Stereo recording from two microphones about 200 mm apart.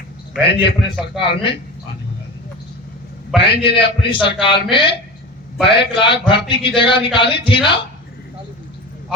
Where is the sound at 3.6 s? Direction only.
25° left (ahead or behind).